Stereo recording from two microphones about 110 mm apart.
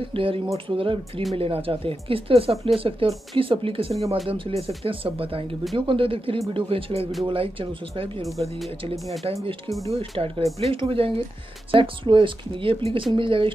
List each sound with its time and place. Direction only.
0.0 s speech: 55° right (ahead or behind)
8.3 s speech: centre (ahead or behind)
9.2 s speech: 65° right (ahead or behind)